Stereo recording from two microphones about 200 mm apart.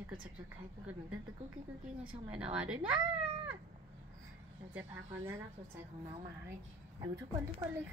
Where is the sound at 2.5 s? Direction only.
5° right (ahead or behind).